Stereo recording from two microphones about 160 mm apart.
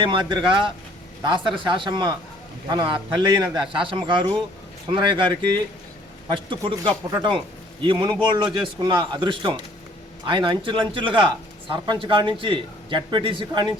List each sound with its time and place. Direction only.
0.0 s a man's voice: 30° right (ahead or behind)